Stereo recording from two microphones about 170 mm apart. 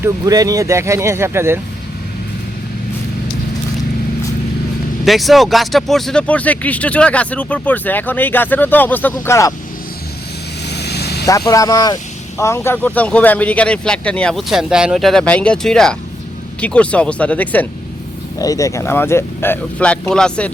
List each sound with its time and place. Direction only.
0.0 s speech: 20° right (ahead or behind)
5.0 s speech: centre (ahead or behind); by 9.5 s 15° left (ahead or behind)
10.7 s vehicle: 75° left (ahead or behind)
11.3 s speech: 20° left (ahead or behind)
18.3 s speech: 20° left (ahead or behind)